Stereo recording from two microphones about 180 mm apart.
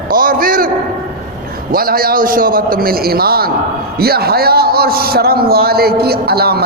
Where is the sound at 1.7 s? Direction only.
55° right (ahead or behind).